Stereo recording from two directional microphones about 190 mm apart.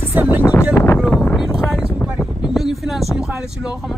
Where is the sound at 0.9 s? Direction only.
Centre (ahead or behind).